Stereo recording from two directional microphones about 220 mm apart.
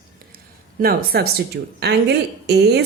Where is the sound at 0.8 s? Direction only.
45° right (ahead or behind).